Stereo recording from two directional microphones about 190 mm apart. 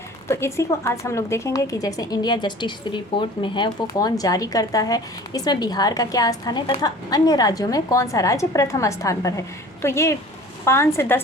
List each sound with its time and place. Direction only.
0.3 s a woman's voice: 15° left (ahead or behind)